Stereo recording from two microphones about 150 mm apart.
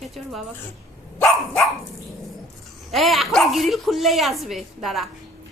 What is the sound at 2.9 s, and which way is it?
Speech, centre (ahead or behind).